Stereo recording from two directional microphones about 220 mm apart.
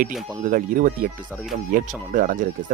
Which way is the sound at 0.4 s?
35° right (ahead or behind).